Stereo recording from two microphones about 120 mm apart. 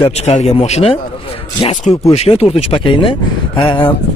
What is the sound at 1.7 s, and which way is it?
Speech, 90° left.